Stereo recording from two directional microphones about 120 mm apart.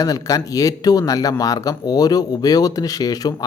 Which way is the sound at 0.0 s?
30° left (ahead or behind).